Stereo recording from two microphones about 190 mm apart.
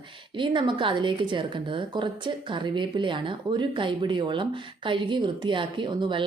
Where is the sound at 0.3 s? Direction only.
25° right (ahead or behind).